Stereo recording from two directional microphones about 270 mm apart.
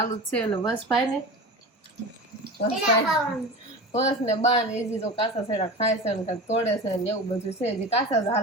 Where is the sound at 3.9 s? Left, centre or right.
Left.